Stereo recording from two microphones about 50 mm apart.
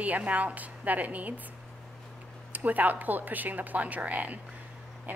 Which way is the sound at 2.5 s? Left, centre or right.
Right.